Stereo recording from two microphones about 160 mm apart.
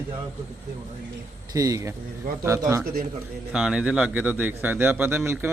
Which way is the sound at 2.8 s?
60° right (ahead or behind).